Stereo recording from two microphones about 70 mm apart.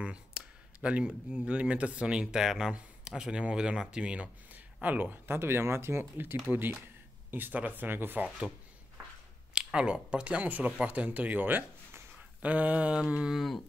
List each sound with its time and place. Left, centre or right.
0.0 s speech: centre
4.8 s speech: right
9.5 s speech: centre